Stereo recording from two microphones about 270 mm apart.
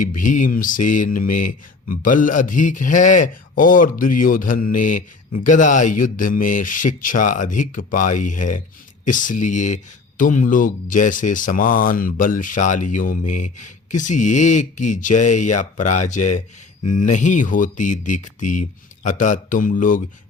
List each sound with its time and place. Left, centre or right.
0.2 s a man's voice: left